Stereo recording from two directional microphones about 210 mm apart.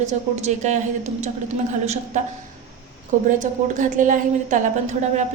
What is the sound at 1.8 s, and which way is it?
Speech, 30° right (ahead or behind).